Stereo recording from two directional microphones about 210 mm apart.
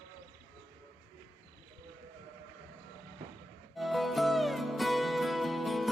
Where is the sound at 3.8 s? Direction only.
Centre (ahead or behind).